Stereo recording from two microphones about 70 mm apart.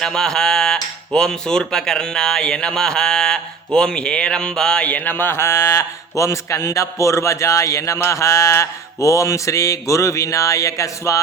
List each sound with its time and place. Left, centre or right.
0.0 s speech: centre; by 11.2 s left